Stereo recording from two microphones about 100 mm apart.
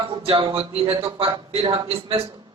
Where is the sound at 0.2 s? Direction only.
65° right (ahead or behind).